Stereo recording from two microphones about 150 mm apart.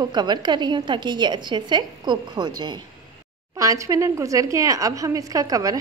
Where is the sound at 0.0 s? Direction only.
30° right (ahead or behind).